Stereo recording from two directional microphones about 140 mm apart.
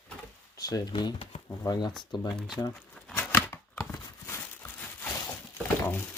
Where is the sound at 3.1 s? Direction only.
15° left (ahead or behind).